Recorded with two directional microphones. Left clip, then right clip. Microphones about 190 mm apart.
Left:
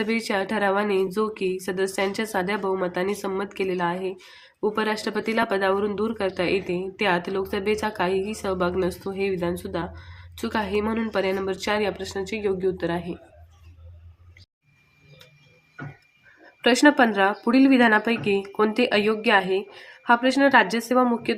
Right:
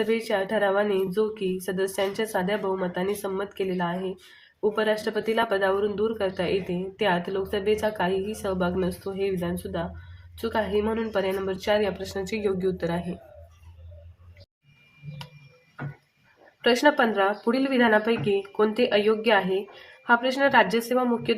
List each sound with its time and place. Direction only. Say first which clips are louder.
0.0 s speech: even; 25° left (ahead or behind)
16.6 s speech: left 3 dB; 20° left (ahead or behind)